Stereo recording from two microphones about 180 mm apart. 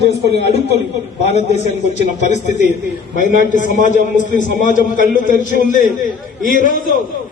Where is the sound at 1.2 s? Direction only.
35° left (ahead or behind).